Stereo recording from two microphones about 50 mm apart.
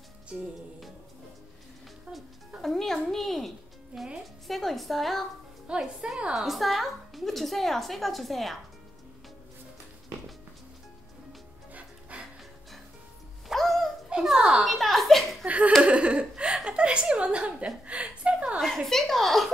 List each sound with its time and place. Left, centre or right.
0.3 s music: right
2.6 s music: centre
4.5 s a woman's voice: centre
5.7 s a woman's voice: centre
6.3 s a woman's voice: centre
11.7 s music: right
13.5 s music: centre
14.2 s a sound: centre
15.4 s laughter: right
15.8 s a sound: right
16.6 s chuckle: right
18.6 s a woman's voice: centre